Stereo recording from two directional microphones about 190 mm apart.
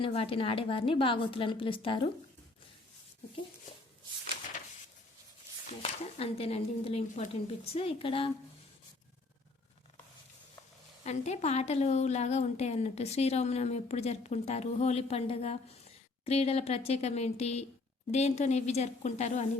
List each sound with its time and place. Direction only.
0.0 s a woman's voice: 30° left (ahead or behind)
5.8 s a woman's voice: 30° left (ahead or behind)
11.0 s a woman's voice: 35° left (ahead or behind)